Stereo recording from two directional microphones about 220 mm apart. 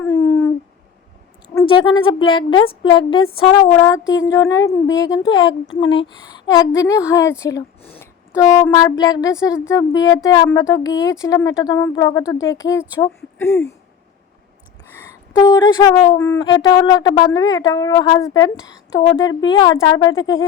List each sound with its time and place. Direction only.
0.0 s a sound: 15° left (ahead or behind)
1.5 s a woman's voice: 20° left (ahead or behind)
15.4 s a woman's voice: 15° left (ahead or behind)
20.1 s speech: 65° left (ahead or behind)